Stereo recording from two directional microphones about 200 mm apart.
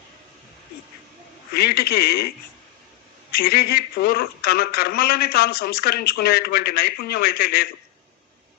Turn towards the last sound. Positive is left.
turn(degrees=50)  # may be behind; listen again after turning